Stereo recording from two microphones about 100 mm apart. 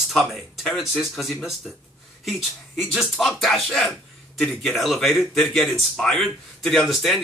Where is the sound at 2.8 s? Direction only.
Centre (ahead or behind).